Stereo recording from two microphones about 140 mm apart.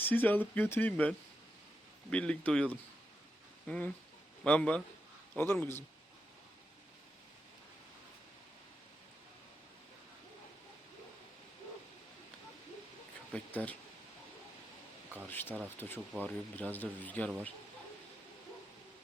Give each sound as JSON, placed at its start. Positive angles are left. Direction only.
{"t": 0.0, "sound": "speech", "side_deg": 10}
{"t": 3.7, "sound": "speech", "side_deg": 10}
{"t": 13.3, "sound": "speech", "side_deg": 10}
{"t": 15.3, "sound": "speech", "side_deg": 15}